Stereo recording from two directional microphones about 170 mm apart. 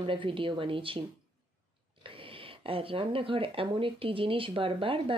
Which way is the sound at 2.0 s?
30° right (ahead or behind).